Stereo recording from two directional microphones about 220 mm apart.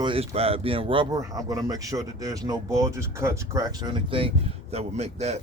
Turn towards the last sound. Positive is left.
turn(degrees=-30)  # may be behind; listen again after turning